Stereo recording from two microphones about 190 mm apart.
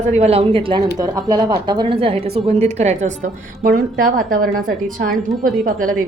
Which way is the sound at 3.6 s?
50° right (ahead or behind).